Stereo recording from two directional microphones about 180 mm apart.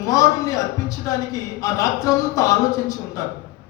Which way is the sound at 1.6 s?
20° left (ahead or behind).